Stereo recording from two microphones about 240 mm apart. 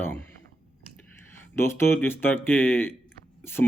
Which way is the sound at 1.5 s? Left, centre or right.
Centre.